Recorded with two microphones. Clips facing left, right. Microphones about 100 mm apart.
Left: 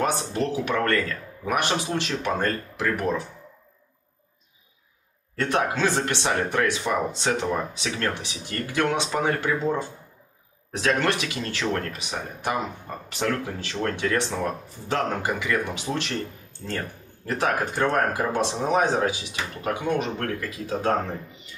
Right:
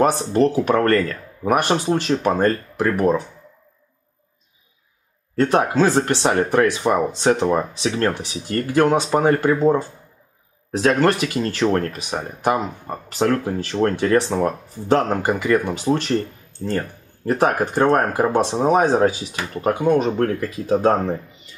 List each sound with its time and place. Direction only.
0.0 s speech: 40° right (ahead or behind)
5.3 s speech: 40° right (ahead or behind)